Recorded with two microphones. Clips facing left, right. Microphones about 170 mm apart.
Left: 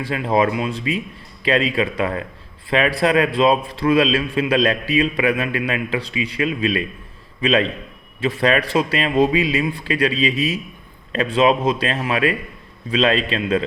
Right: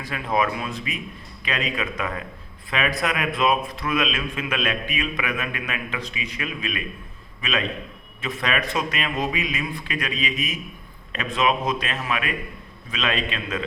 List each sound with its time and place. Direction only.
0.0 s a man's voice: 30° left (ahead or behind)